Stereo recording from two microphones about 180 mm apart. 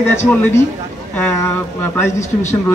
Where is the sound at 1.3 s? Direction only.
15° left (ahead or behind).